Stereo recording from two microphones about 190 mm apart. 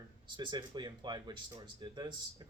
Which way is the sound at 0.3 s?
25° right (ahead or behind).